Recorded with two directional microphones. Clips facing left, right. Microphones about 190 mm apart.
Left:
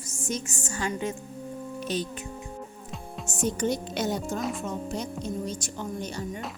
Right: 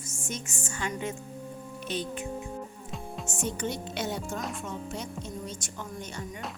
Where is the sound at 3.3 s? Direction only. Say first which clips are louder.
Left 6 dB; 40° left (ahead or behind).